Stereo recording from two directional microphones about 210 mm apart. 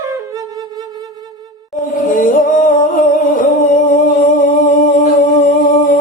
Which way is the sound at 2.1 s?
40° left (ahead or behind).